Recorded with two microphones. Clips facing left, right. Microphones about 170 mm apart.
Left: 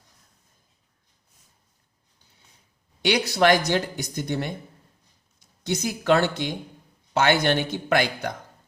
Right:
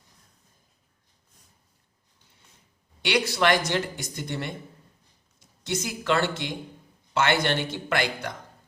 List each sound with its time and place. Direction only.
3.0 s speech: 40° left (ahead or behind)
5.6 s a man's voice: 40° left (ahead or behind)